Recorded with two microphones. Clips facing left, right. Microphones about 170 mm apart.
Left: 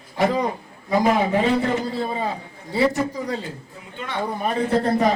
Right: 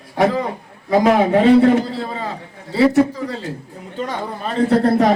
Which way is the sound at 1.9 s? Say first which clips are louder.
Left 1 dB; 15° left (ahead or behind).